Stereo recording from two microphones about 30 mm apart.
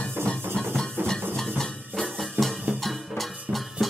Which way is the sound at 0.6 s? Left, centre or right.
Left.